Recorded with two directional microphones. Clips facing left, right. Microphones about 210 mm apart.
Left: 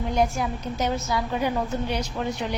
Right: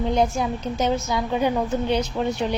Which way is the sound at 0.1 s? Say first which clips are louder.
Even; 20° right (ahead or behind).